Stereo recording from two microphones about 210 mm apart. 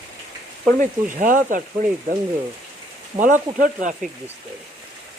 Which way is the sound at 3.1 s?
40° right (ahead or behind).